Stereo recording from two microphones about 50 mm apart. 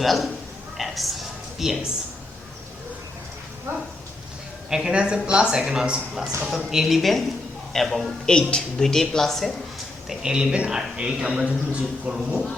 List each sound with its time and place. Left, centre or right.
0.0 s a man's voice: centre
0.8 s a sound: centre
3.7 s dog: right
4.7 s a man's voice: centre
8.3 s speech: centre
10.2 s a man's voice: centre